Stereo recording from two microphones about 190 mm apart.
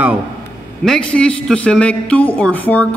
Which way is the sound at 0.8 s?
5° left (ahead or behind).